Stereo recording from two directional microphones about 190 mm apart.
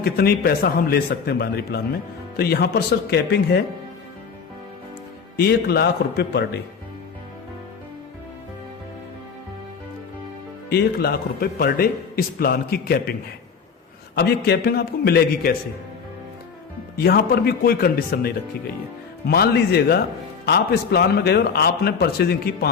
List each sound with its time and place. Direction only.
0.0 s a man's voice: 55° left (ahead or behind)
5.4 s a man's voice: 55° left (ahead or behind)
10.7 s a man's voice: 55° left (ahead or behind)
14.2 s a man's voice: 55° left (ahead or behind)
17.0 s a man's voice: 55° left (ahead or behind)